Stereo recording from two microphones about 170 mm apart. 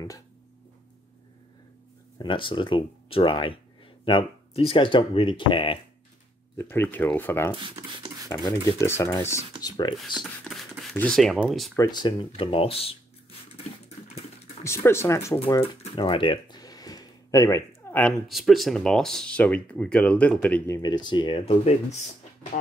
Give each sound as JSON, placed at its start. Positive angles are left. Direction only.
{"t": 2.1, "sound": "speech", "side_deg": 30}
{"t": 6.6, "sound": "speech", "side_deg": 10}
{"t": 9.9, "sound": "speech", "side_deg": 0}
{"t": 11.7, "sound": "speech", "side_deg": 20}
{"t": 14.6, "sound": "speech", "side_deg": 15}
{"t": 15.6, "sound": "a sound", "side_deg": 30}
{"t": 18.3, "sound": "speech", "side_deg": 0}